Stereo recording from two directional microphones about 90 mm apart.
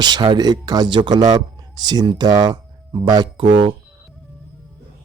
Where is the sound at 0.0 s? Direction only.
55° right (ahead or behind).